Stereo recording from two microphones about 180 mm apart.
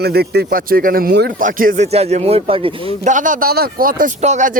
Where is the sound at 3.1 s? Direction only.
45° right (ahead or behind).